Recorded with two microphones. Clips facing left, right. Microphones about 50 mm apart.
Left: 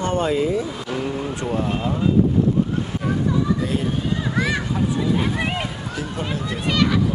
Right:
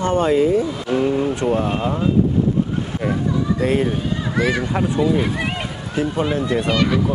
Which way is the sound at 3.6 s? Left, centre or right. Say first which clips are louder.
Right 5 dB; right.